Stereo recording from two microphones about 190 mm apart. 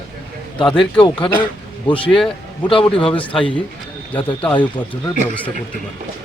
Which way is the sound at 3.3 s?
25° left (ahead or behind).